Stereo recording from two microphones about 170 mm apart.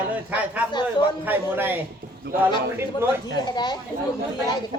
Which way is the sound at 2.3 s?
70° right (ahead or behind).